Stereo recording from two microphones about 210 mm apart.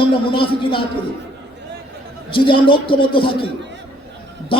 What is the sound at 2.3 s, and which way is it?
A woman's voice, 25° left (ahead or behind).